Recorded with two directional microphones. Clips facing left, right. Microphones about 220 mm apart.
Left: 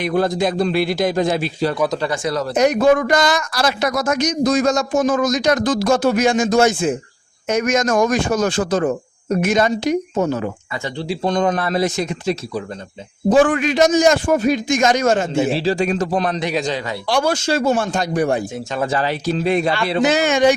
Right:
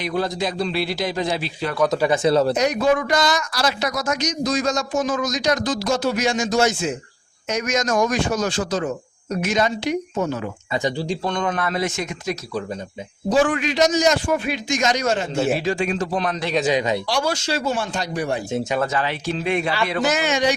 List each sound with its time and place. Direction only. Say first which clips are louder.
0.0 s speech: left 5 dB; 50° left (ahead or behind)
2.0 s speech: right 4 dB; 25° right (ahead or behind)
2.6 s speech: left 5 dB; 50° left (ahead or behind); by 12.4 s 35° left (ahead or behind)
13.3 s speech: left 4 dB; 50° left (ahead or behind)
15.5 s speech: left 4 dB; 35° left (ahead or behind)
16.7 s speech: right 5 dB; 20° right (ahead or behind)
17.1 s speech: left 5 dB; 55° left (ahead or behind)
18.9 s speech: left 4 dB; 40° left (ahead or behind)
20.1 s speech: left 6 dB; 50° left (ahead or behind)